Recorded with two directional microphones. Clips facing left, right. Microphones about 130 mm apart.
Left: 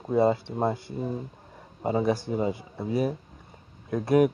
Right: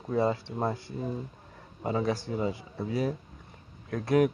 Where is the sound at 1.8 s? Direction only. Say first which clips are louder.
Left 4 dB; 30° left (ahead or behind).